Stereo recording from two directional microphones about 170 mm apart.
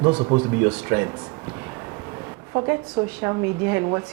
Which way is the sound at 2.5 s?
15° right (ahead or behind).